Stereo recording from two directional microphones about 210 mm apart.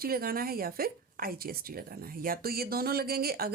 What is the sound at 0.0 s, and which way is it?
Speech, 45° right (ahead or behind).